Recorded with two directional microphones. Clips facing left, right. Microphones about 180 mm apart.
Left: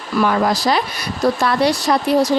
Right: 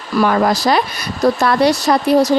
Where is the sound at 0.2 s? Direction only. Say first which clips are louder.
Right 2 dB; 50° right (ahead or behind).